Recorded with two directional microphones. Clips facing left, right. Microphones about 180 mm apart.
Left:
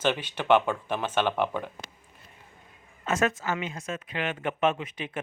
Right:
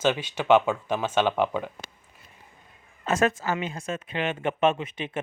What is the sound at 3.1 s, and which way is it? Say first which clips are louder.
Speech: right 3 dB; 30° right (ahead or behind).